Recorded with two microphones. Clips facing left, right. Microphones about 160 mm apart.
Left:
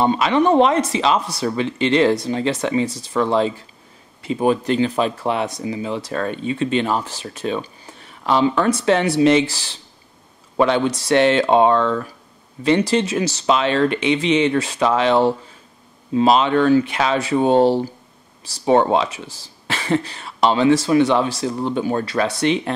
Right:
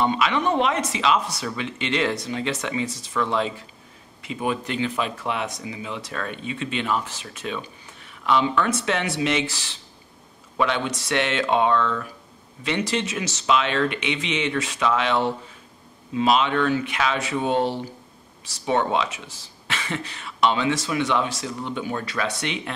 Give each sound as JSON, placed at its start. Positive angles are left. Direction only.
{"t": 0.0, "sound": "speech", "side_deg": 35}